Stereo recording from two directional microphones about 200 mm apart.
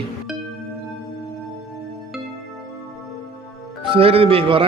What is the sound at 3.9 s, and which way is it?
Speech, 30° right (ahead or behind).